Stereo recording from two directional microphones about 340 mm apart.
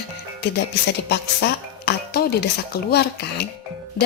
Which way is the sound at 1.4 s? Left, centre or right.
Left.